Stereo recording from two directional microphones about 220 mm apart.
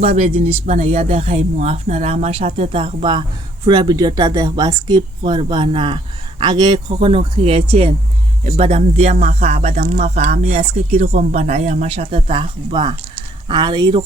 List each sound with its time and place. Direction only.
0.2 s speech: 30° right (ahead or behind)